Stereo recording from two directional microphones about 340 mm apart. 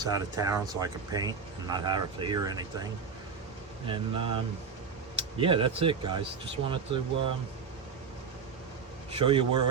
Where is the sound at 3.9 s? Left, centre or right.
Centre.